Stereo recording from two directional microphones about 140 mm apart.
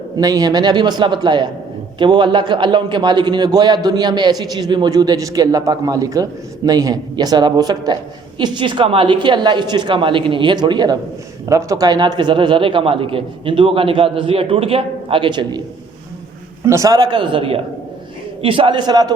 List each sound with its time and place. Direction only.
0.2 s a man's voice: 25° right (ahead or behind)
16.6 s a man's voice: 20° right (ahead or behind)